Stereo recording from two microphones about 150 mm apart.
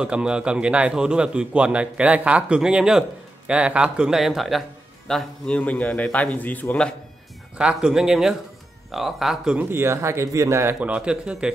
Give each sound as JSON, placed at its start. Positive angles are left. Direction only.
{"t": 0.0, "sound": "a man's voice", "side_deg": -5}
{"t": 7.5, "sound": "a man's voice", "side_deg": -5}
{"t": 9.7, "sound": "speech", "side_deg": -15}